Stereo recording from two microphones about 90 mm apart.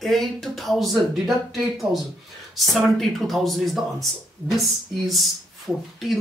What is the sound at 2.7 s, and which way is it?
Speech, centre (ahead or behind).